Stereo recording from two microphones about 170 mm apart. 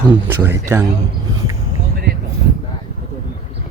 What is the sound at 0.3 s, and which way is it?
Speech, 10° right (ahead or behind).